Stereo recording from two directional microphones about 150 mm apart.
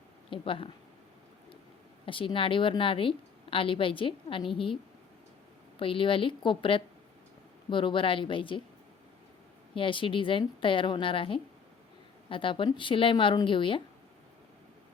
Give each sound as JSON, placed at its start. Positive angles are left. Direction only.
{"t": 0.3, "sound": "speech", "side_deg": 35}
{"t": 2.0, "sound": "a woman's voice", "side_deg": 35}
{"t": 5.8, "sound": "a woman's voice", "side_deg": 35}
{"t": 9.7, "sound": "a woman's voice", "side_deg": 35}